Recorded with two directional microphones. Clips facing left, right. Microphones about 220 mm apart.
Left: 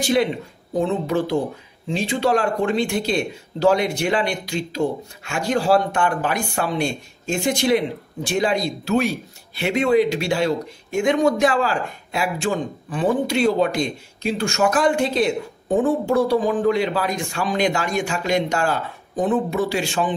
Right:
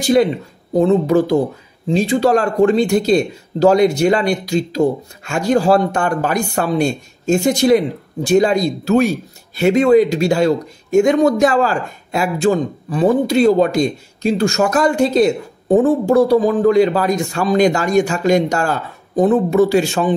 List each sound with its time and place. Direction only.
0.0 s speech: 40° right (ahead or behind)